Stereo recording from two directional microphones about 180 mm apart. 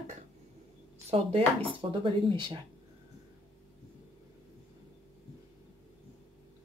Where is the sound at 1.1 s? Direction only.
30° right (ahead or behind).